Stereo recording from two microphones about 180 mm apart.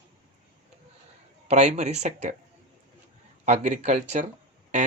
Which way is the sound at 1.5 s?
40° right (ahead or behind).